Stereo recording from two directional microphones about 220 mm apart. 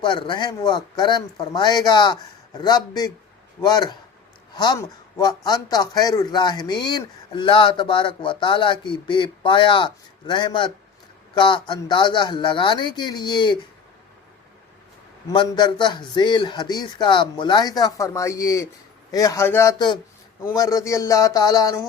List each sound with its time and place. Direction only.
0.0 s speech: 20° left (ahead or behind)
15.3 s speech: 20° left (ahead or behind)